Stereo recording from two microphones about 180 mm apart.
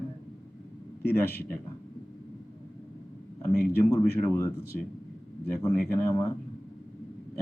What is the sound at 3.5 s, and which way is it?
Speech, 60° left (ahead or behind).